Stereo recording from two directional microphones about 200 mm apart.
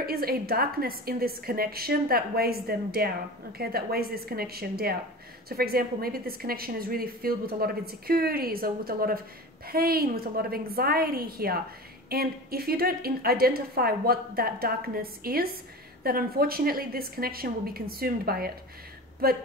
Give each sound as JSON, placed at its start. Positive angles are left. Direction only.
{"t": 0.0, "sound": "a woman's voice", "side_deg": -50}